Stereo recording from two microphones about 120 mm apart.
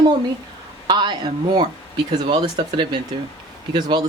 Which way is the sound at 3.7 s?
35° right (ahead or behind).